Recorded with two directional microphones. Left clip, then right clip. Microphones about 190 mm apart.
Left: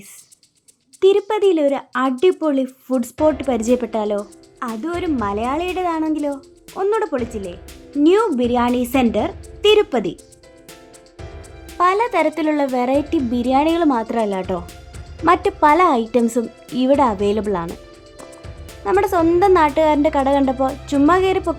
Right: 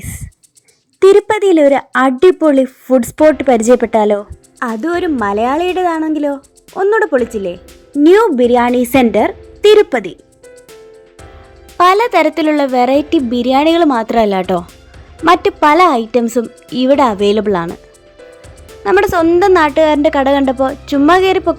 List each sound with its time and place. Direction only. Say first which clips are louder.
1.1 s speech: right 7 dB; 25° right (ahead or behind)
11.8 s speech: right 7 dB; 20° right (ahead or behind)
18.8 s speech: right 5 dB; 25° right (ahead or behind)